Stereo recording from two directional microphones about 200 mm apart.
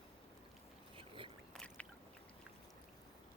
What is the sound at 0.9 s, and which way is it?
Boat, 25° right (ahead or behind).